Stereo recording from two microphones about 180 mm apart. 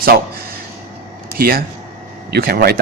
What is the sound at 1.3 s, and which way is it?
Speech, 55° right (ahead or behind).